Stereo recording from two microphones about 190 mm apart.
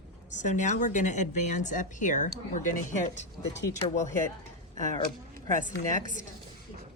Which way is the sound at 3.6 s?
15° left (ahead or behind).